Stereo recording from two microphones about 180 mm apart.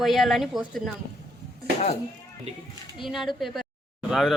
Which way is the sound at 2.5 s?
35° right (ahead or behind).